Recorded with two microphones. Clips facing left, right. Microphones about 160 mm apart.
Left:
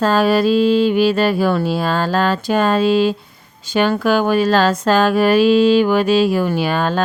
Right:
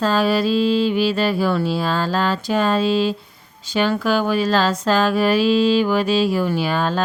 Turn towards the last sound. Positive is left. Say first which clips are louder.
# left 2 dB
turn(degrees=60)  # may be behind; listen again after turning